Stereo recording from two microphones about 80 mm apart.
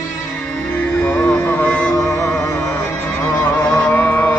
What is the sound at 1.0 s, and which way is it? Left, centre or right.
Music, centre.